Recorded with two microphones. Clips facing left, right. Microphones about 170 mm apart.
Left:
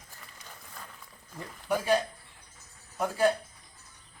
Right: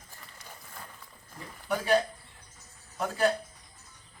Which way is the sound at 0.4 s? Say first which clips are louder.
Right 1 dB; 10° right (ahead or behind).